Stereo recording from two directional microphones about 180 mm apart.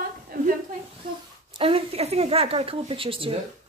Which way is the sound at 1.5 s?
30° right (ahead or behind).